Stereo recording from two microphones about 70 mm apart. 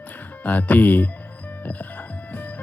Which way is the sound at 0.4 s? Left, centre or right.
Left.